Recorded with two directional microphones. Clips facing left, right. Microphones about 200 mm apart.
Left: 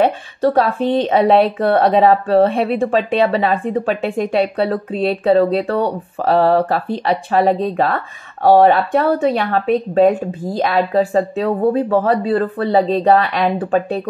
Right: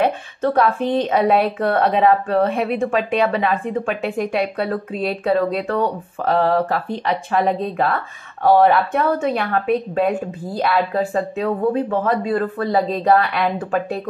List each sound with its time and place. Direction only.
0.0 s a woman's voice: 35° left (ahead or behind)